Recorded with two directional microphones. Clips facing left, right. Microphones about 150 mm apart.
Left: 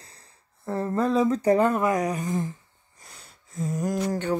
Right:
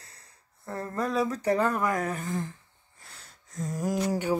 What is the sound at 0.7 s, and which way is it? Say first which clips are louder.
Speech: left 6 dB; 30° left (ahead or behind).